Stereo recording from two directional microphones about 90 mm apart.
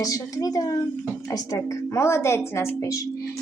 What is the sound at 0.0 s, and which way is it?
Speech, 40° left (ahead or behind).